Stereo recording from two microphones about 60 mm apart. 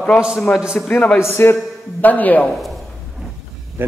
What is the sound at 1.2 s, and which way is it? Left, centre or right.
Speech, left.